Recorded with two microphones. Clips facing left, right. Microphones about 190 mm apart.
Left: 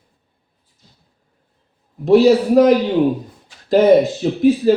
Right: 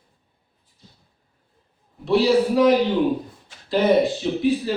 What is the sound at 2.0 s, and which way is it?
Speech, 45° left (ahead or behind).